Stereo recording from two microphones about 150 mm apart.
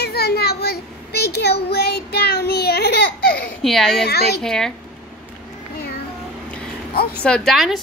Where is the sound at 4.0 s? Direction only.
90° left.